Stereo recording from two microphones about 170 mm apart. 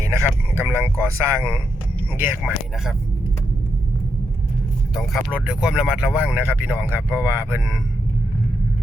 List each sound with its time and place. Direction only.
0.0 s speech: 15° right (ahead or behind)
4.9 s speech: 5° right (ahead or behind)